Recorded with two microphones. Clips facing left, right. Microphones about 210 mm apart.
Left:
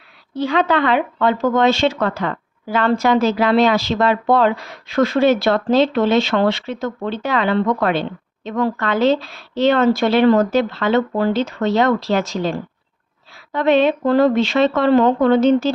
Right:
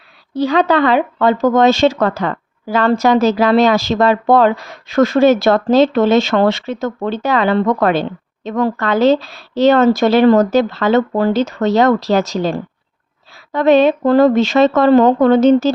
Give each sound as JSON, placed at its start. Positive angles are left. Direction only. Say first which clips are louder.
{"t": 0.3, "sound": "speech", "louder": "right 4 dB", "side_deg": -40}